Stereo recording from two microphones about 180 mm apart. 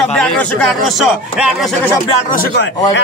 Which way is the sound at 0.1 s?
5° left (ahead or behind).